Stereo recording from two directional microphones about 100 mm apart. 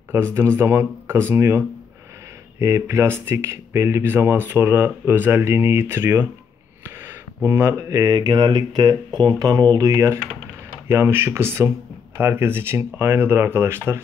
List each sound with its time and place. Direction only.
0.1 s speech: 30° right (ahead or behind)
2.6 s speech: 30° right (ahead or behind)
7.4 s speech: 25° right (ahead or behind)